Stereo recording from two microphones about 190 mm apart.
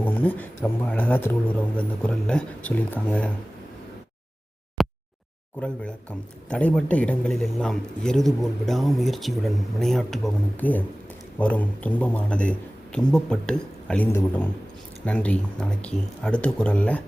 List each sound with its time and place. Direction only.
0.0 s speech: 10° left (ahead or behind)
4.8 s a sound: centre (ahead or behind)
5.5 s speech: 5° left (ahead or behind)